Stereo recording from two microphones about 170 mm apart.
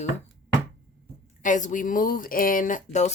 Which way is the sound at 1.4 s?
50° left (ahead or behind).